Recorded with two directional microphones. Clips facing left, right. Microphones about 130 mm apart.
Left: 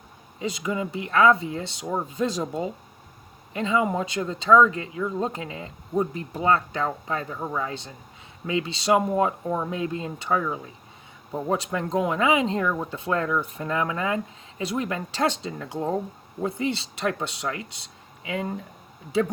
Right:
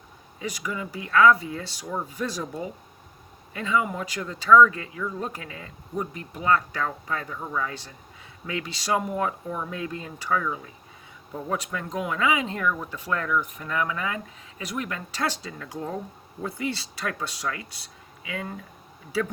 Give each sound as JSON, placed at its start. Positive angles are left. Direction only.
{"t": 0.3, "sound": "speech", "side_deg": 25}